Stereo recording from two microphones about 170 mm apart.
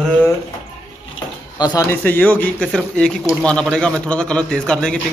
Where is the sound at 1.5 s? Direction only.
25° left (ahead or behind).